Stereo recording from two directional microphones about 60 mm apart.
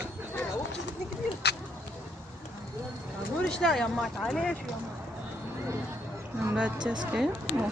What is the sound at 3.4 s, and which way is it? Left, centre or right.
Speech, centre.